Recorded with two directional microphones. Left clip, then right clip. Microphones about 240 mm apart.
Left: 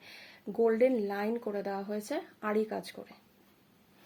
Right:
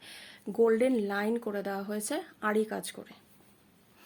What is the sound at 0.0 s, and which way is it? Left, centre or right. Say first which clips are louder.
Speech: right 2 dB; centre.